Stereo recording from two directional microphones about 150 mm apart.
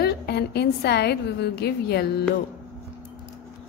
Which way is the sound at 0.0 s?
90° left.